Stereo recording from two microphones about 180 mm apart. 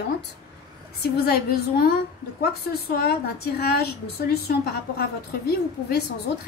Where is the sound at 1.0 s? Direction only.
60° left (ahead or behind).